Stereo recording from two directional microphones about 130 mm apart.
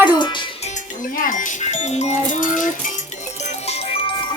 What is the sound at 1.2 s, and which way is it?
A child's voice, 85° left.